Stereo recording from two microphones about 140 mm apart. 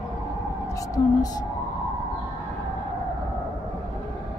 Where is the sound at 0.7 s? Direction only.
25° left (ahead or behind).